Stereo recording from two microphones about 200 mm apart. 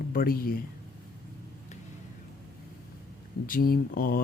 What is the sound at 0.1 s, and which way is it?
Speech, 45° left (ahead or behind).